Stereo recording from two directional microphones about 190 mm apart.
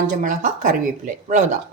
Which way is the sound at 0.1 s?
45° right (ahead or behind).